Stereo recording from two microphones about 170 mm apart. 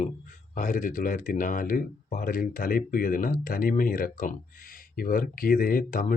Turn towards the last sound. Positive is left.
turn(degrees=55)  # may be behind; listen again after turning